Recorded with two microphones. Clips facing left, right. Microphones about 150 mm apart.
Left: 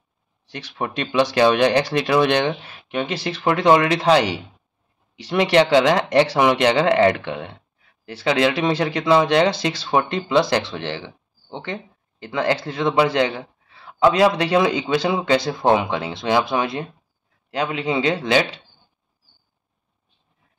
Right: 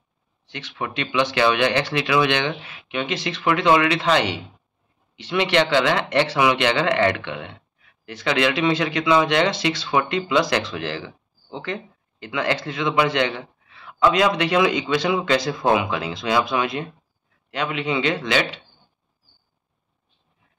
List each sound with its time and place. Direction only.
0.5 s speech: 35° left (ahead or behind)